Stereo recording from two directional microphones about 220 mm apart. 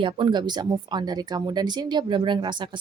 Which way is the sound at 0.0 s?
20° right (ahead or behind).